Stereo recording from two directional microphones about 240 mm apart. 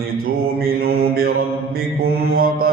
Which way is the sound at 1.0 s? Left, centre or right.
Right.